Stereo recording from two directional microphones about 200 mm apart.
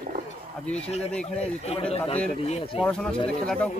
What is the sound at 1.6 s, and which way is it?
Speech, 30° left (ahead or behind).